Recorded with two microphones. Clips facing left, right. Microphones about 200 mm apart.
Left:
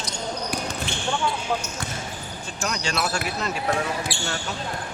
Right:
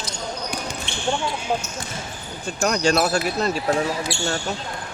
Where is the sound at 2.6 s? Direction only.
45° right (ahead or behind).